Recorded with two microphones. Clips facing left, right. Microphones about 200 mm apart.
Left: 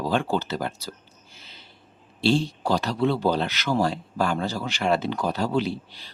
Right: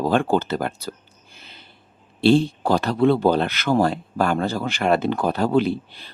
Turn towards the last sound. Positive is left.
turn(degrees=-55)  # may be behind; listen again after turning